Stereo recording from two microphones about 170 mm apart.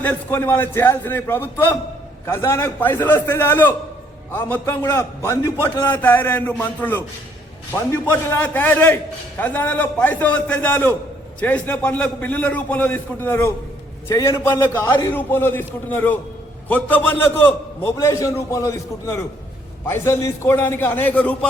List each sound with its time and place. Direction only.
0.0 s a man's voice: 10° left (ahead or behind)